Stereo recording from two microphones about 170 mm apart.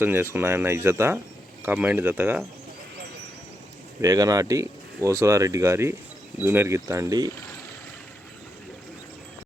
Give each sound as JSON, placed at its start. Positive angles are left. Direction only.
{"t": 0.0, "sound": "speech", "side_deg": -10}
{"t": 4.0, "sound": "speech", "side_deg": -20}